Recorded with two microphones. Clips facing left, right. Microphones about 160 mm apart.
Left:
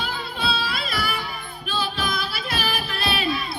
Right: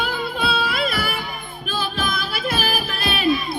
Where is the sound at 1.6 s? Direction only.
50° right (ahead or behind).